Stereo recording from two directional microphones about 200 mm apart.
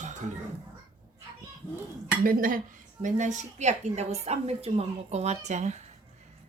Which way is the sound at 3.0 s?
40° right (ahead or behind).